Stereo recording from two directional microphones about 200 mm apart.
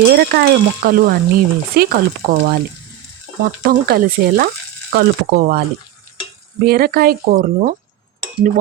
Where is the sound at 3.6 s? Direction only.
45° right (ahead or behind).